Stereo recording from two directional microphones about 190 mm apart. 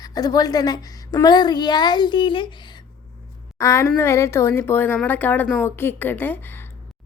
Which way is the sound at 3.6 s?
15° left (ahead or behind).